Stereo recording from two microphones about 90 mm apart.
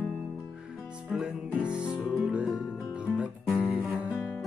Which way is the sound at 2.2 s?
15° right (ahead or behind).